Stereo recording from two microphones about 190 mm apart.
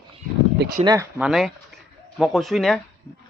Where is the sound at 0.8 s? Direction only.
25° right (ahead or behind).